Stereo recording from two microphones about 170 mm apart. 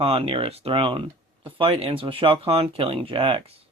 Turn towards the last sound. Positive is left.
turn(degrees=-30)  # may be behind; listen again after turning